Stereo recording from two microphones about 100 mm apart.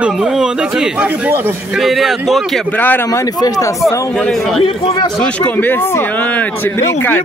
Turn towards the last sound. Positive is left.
turn(degrees=15)  # may be behind; listen again after turning